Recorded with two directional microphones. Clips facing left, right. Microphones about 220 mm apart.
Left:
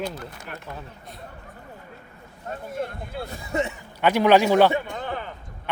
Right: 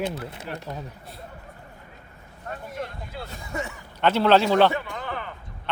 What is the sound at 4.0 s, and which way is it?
Speech, 15° left (ahead or behind).